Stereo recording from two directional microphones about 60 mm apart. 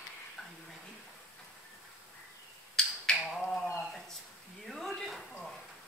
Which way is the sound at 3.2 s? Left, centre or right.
Centre.